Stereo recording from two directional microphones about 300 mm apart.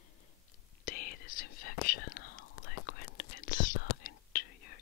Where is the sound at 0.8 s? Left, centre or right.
Left.